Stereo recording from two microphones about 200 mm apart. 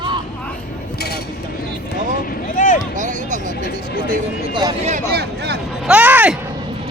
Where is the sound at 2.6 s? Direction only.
40° left (ahead or behind).